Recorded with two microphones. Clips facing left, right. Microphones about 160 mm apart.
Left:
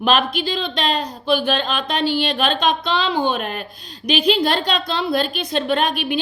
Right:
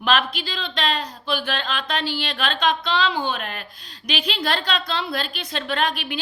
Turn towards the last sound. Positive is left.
turn(degrees=15)  # may be behind; listen again after turning